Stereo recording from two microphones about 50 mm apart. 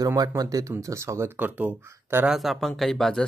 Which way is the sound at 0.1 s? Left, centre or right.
Right.